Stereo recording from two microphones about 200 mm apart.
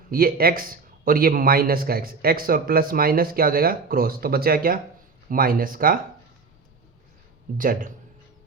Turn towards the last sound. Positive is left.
turn(degrees=-45)  # may be behind; listen again after turning